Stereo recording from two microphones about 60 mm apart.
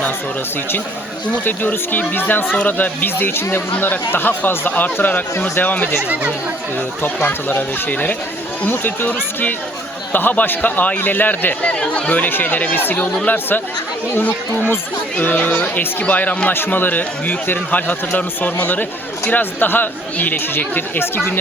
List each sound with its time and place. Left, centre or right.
1.5 s speech: left
7.0 s speech: left
11.6 s speech: centre